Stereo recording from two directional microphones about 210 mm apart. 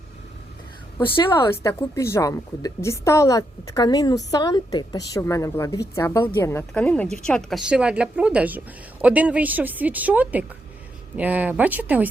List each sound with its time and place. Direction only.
0.9 s a woman's voice: 20° left (ahead or behind); by 12.0 s 5° right (ahead or behind)